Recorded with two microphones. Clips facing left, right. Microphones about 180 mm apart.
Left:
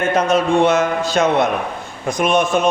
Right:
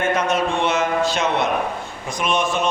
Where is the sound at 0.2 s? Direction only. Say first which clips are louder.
Left 6 dB; 40° left (ahead or behind).